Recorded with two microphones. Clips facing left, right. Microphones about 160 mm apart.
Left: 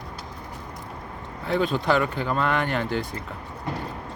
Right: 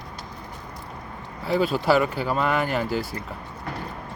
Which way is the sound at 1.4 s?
5° right (ahead or behind).